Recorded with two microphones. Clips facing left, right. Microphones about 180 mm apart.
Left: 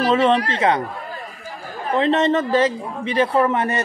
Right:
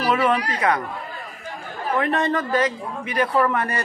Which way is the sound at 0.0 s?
25° left (ahead or behind).